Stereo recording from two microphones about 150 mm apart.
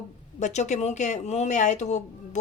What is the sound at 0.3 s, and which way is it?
Speech, 50° left (ahead or behind).